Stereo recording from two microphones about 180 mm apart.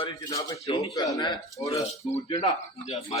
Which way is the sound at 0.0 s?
20° left (ahead or behind).